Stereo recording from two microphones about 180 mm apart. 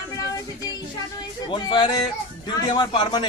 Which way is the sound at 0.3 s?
20° left (ahead or behind).